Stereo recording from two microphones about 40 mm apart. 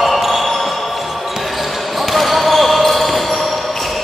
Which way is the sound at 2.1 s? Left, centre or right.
Centre.